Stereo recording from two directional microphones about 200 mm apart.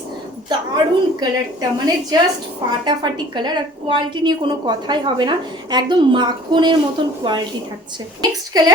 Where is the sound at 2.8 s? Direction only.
20° right (ahead or behind).